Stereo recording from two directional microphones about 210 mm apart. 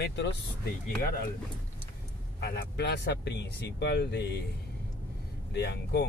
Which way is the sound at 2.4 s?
55° left (ahead or behind).